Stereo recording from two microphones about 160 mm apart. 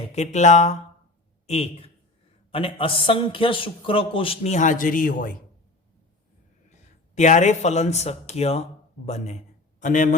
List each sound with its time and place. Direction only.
0.1 s a man's voice: 45° left (ahead or behind)
7.2 s speech: 45° left (ahead or behind)